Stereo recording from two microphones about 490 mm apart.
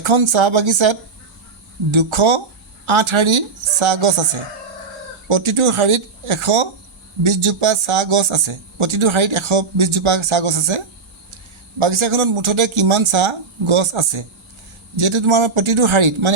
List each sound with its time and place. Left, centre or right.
0.0 s speech: right